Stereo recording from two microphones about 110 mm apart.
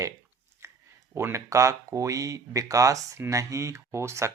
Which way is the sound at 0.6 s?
25° right (ahead or behind).